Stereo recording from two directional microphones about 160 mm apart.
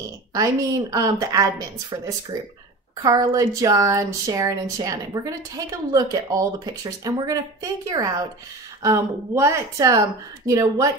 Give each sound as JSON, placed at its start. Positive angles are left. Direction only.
{"t": 0.3, "sound": "speech", "side_deg": -20}